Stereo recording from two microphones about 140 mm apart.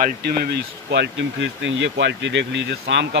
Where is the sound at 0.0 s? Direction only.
90° right.